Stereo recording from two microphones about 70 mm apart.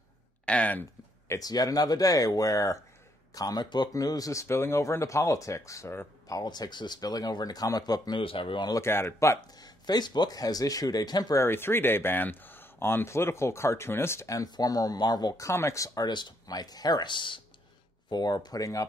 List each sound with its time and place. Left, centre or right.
0.5 s speech: left
1.4 s speech: left
3.3 s speech: left
3.9 s speech: left
6.4 s speech: left
8.8 s speech: left
9.6 s speech: left
11.3 s speech: left
14.3 s speech: left
15.3 s speech: left
18.1 s speech: left